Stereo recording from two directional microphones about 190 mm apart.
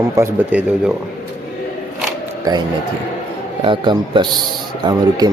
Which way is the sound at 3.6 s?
25° right (ahead or behind).